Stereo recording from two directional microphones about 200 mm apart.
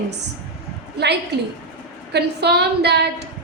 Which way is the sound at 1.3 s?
55° right (ahead or behind).